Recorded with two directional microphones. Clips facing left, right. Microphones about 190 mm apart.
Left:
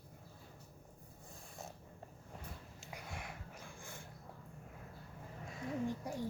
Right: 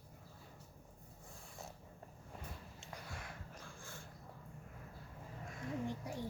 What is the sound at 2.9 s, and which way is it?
Dog, 15° left (ahead or behind).